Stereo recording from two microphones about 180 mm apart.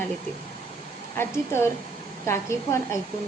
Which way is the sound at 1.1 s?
15° left (ahead or behind).